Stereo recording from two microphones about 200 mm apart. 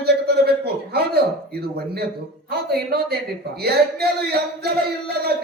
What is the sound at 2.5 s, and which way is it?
Speech, 50° right (ahead or behind).